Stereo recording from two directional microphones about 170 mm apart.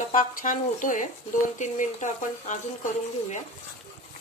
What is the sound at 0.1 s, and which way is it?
Speech, 50° left (ahead or behind).